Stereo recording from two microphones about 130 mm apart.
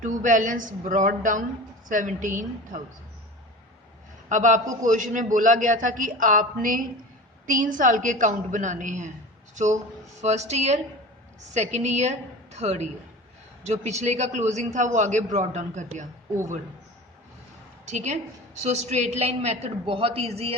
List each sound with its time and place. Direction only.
0.0 s a man's voice: 80° right
4.3 s a woman's voice: 70° right (ahead or behind)
4.8 s a man's voice: 80° right
10.2 s a man's voice: 60° right (ahead or behind)
17.8 s a man's voice: 60° right (ahead or behind)